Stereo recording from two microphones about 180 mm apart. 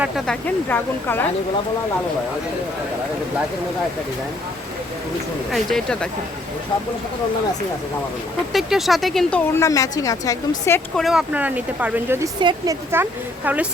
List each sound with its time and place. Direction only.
0.3 s speech: 10° left (ahead or behind)
5.5 s speech: 5° left (ahead or behind)
8.5 s speech: centre (ahead or behind)
9.4 s a woman's voice: 15° left (ahead or behind)
10.9 s speech: centre (ahead or behind)
12.4 s speech: 25° right (ahead or behind)
12.9 s speech: 10° right (ahead or behind)